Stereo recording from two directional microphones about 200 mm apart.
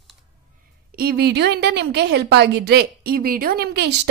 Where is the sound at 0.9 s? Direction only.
50° right (ahead or behind).